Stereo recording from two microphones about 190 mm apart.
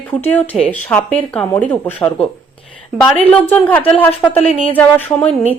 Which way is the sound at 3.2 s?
10° left (ahead or behind).